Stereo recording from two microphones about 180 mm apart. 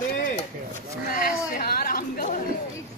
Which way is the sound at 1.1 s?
55° left (ahead or behind).